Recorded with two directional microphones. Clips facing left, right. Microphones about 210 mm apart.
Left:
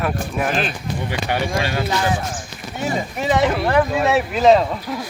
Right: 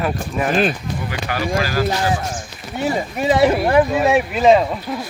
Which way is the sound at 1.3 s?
25° left (ahead or behind).